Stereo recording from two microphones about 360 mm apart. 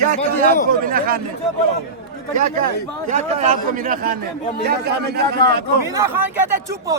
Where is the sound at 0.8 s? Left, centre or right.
Right.